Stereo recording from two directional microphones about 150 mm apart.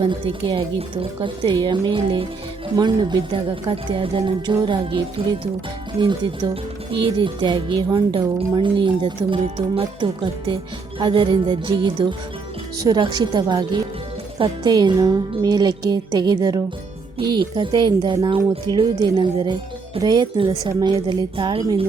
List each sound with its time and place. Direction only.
0.0 s speech: 35° right (ahead or behind)